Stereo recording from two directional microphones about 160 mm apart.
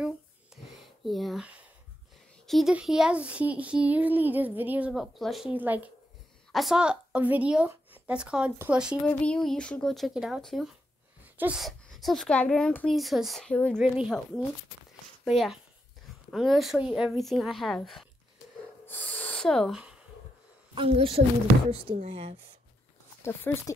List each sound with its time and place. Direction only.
0.5 s wheeze: 5° right (ahead or behind)
1.0 s speech: centre (ahead or behind)
11.2 s sneeze: 10° right (ahead or behind)
11.6 s speech: centre (ahead or behind)
13.7 s speech: 5° right (ahead or behind)
20.7 s a woman's voice: 35° right (ahead or behind)
23.2 s speech: 15° left (ahead or behind)